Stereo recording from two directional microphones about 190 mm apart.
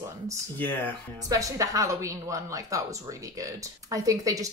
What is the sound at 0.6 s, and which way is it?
Speech, 10° left (ahead or behind).